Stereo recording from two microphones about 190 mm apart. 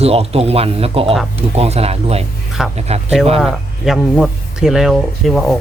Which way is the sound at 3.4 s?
Centre (ahead or behind).